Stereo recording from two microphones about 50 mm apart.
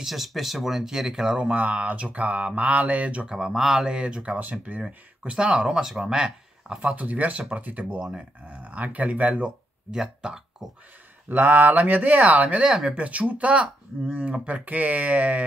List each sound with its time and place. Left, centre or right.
0.0 s speech: centre
1.5 s speech: right
3.3 s speech: centre
3.9 s speech: right
5.2 s speech: right
6.9 s speech: right
8.0 s speech: right
9.3 s speech: centre
11.2 s speech: right
12.6 s speech: centre
12.9 s speech: right